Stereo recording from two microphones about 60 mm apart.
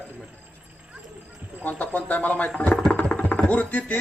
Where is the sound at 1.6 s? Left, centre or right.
Left.